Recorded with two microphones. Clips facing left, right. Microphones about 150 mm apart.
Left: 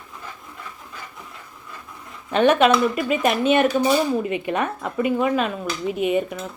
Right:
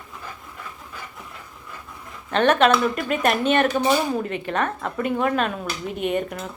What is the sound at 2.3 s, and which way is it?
Speech, 10° left (ahead or behind).